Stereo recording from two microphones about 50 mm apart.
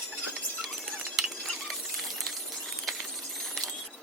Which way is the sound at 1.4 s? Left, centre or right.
Centre.